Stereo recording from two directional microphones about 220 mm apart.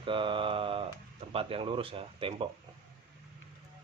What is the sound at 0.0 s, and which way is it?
Mantra, 25° right (ahead or behind).